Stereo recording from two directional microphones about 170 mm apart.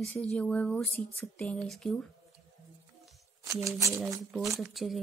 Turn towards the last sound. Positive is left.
turn(degrees=0)  # may be behind; listen again after turning